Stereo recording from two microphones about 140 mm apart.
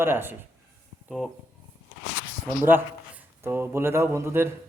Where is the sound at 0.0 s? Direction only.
15° right (ahead or behind).